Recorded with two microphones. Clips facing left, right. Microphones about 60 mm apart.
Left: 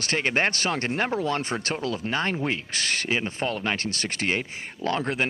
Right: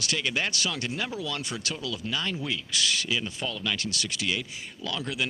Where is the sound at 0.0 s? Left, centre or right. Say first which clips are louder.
Left 5 dB; left.